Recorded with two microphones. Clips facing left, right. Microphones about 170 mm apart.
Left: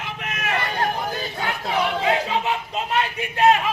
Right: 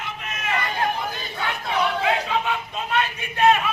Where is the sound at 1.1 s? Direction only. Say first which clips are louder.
Left 2 dB; 35° left (ahead or behind).